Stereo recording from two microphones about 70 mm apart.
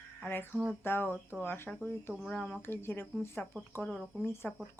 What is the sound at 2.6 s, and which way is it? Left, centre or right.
Speech, left.